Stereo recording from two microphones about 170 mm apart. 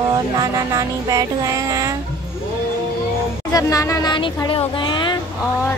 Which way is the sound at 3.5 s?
20° left (ahead or behind).